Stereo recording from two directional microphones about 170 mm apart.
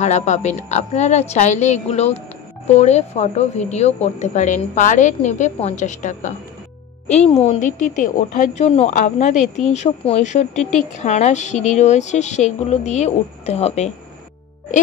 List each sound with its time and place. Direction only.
0.0 s a woman's voice: 40° left (ahead or behind)